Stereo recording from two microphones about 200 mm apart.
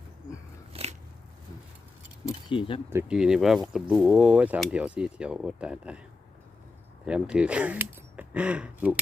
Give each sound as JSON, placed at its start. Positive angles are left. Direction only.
{"t": 0.7, "sound": "biting", "side_deg": -30}
{"t": 2.5, "sound": "speech", "side_deg": 25}
{"t": 2.9, "sound": "speech", "side_deg": -5}
{"t": 7.0, "sound": "speech", "side_deg": -5}